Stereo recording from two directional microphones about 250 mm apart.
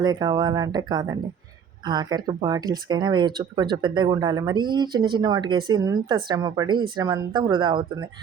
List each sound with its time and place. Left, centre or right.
0.0 s speech: centre